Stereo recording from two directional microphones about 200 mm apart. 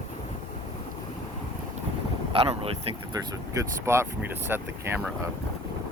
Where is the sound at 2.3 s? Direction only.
30° right (ahead or behind).